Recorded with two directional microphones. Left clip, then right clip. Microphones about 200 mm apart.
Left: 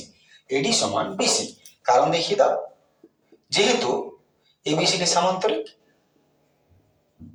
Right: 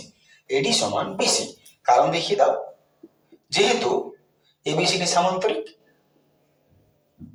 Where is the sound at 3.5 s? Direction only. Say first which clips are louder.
Even; 15° left (ahead or behind).